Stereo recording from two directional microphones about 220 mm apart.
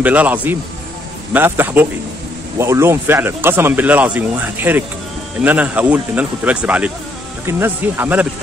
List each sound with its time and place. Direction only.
0.0 s speech: 5° right (ahead or behind)